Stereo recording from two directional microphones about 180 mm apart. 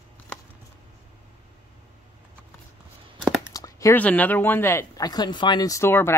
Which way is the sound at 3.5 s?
20° left (ahead or behind).